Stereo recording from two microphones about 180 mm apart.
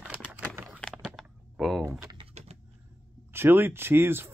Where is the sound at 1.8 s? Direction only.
20° right (ahead or behind).